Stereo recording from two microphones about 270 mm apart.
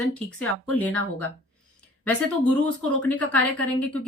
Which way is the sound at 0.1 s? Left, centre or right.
Centre.